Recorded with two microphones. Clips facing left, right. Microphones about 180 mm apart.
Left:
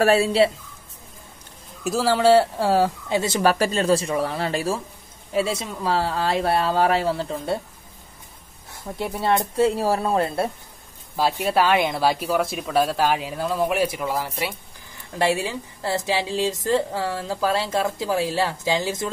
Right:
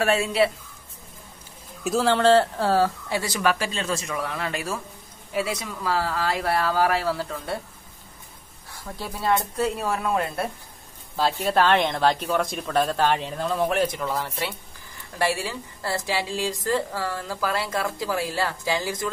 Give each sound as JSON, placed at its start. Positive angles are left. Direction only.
{"t": 0.0, "sound": "speech", "side_deg": 35}
{"t": 1.9, "sound": "speech", "side_deg": 0}
{"t": 3.5, "sound": "speech", "side_deg": 40}
{"t": 8.7, "sound": "speech", "side_deg": 20}
{"t": 11.1, "sound": "speech", "side_deg": 10}